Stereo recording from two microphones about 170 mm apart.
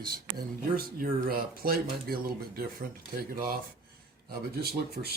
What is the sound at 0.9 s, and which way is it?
Speech, 60° right (ahead or behind).